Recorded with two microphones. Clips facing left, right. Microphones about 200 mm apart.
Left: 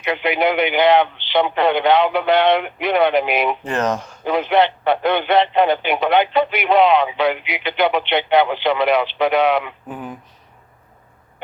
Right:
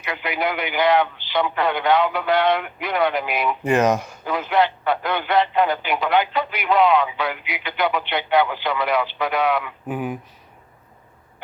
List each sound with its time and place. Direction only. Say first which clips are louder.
0.0 s a man's voice: left 6 dB; 25° left (ahead or behind)
3.6 s speech: right 3 dB; 10° right (ahead or behind)
4.2 s a man's voice: left 8 dB; 25° left (ahead or behind)
9.9 s speech: right 5 dB; 10° right (ahead or behind)